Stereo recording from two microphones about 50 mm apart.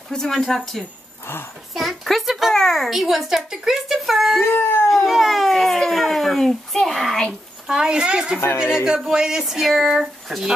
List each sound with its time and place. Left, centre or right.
0.1 s speech: centre
2.9 s speech: centre
7.6 s speech: centre